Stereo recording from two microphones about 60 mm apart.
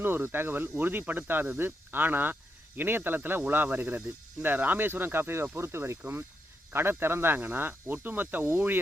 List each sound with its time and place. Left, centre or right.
0.0 s speech: right